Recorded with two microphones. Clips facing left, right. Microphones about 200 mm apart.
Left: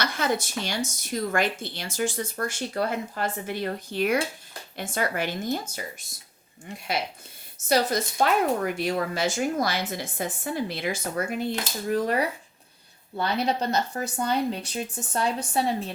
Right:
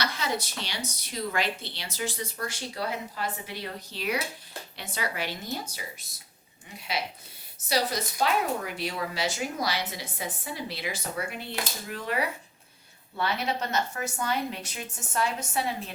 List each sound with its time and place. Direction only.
0.0 s a sound: 50° left (ahead or behind)
0.6 s speech: 45° left (ahead or behind)
7.7 s speech: 50° left (ahead or behind)
13.1 s speech: 35° left (ahead or behind)